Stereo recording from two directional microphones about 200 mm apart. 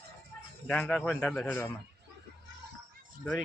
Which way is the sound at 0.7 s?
5° left (ahead or behind).